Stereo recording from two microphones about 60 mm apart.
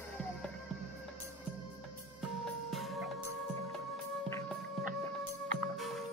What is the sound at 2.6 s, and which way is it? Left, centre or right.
Music, centre.